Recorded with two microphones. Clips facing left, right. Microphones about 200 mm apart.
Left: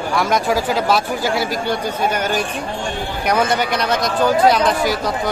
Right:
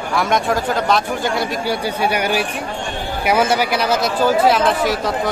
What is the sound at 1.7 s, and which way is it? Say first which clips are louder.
Speech: even; 10° right (ahead or behind).